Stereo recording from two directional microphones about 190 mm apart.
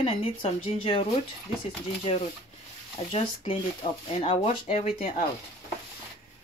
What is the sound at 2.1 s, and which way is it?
Speech, 30° left (ahead or behind).